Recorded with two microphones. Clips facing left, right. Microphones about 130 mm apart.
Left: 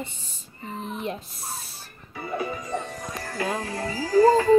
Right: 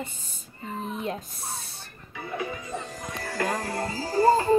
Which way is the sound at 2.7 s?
Centre (ahead or behind).